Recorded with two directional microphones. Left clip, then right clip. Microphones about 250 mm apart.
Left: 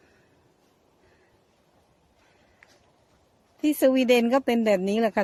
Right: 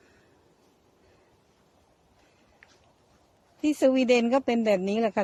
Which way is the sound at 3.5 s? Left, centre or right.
Centre.